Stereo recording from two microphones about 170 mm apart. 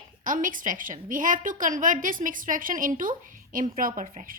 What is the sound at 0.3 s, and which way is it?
A woman's voice, 50° right (ahead or behind).